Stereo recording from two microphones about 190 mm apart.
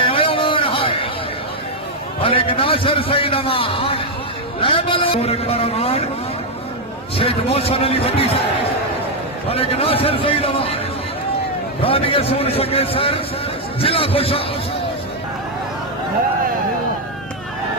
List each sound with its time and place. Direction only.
0.0 s a sound: 30° left (ahead or behind)
2.2 s a man's voice: 30° left (ahead or behind)
7.2 s a man's voice: 30° left (ahead or behind)
9.5 s a man's voice: 30° left (ahead or behind)
11.8 s a man's voice: 30° left (ahead or behind)